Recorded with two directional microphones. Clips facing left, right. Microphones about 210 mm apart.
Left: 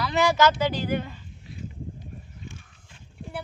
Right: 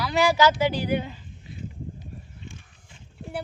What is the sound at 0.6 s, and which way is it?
Speech, 15° right (ahead or behind).